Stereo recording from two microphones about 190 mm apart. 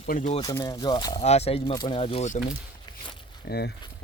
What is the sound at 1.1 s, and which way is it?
Speech, 35° left (ahead or behind).